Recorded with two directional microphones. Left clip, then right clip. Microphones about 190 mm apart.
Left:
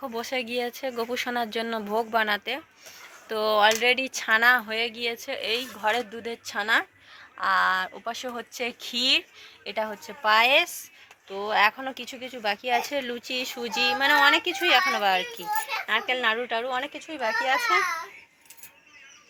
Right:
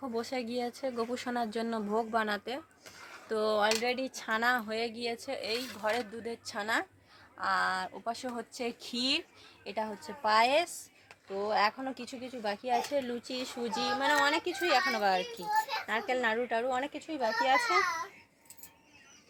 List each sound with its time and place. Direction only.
0.2 s speech: 5° left (ahead or behind)
16.9 s a child's voice: 20° left (ahead or behind)